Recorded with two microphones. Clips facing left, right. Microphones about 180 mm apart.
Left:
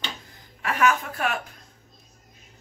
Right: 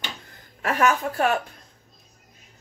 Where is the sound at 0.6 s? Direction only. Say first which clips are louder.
Right 1 dB; 40° right (ahead or behind).